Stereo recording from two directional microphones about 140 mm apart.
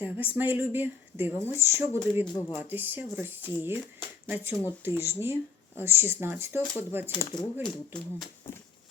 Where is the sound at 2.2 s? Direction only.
30° left (ahead or behind).